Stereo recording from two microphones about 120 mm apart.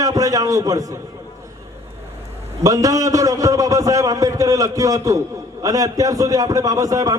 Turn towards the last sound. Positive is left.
turn(degrees=-30)  # may be behind; listen again after turning